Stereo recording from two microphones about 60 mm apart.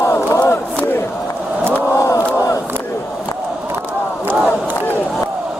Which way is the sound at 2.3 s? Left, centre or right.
Left.